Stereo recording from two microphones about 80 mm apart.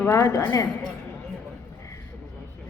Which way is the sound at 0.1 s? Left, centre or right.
Left.